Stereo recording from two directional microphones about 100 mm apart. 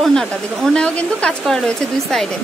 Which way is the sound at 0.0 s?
5° left (ahead or behind).